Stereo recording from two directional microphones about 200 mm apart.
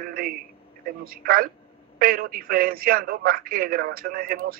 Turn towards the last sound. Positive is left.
turn(degrees=-50)  # may be behind; listen again after turning